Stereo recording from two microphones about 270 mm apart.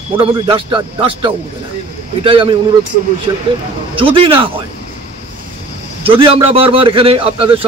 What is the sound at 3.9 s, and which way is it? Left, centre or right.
Speech, centre.